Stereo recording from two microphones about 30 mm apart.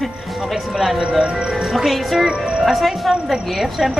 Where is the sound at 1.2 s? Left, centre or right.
Right.